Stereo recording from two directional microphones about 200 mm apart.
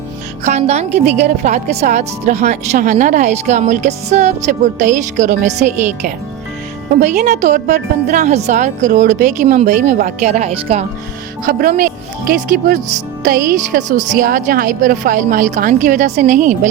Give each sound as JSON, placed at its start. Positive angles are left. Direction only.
{"t": 0.4, "sound": "speech", "side_deg": -35}
{"t": 7.0, "sound": "speech", "side_deg": -35}
{"t": 13.2, "sound": "speech", "side_deg": -40}